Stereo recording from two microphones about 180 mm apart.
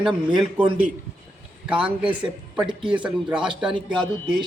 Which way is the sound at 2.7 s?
25° right (ahead or behind).